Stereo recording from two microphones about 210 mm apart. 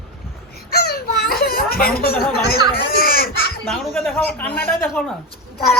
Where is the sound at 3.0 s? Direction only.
45° left (ahead or behind).